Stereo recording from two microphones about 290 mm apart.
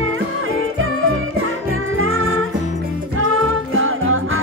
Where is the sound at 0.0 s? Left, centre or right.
Right.